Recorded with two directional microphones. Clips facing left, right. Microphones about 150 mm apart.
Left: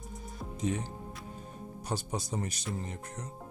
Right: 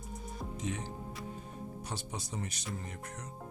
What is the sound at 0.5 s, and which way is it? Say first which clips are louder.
Speech: left 6 dB; 40° left (ahead or behind).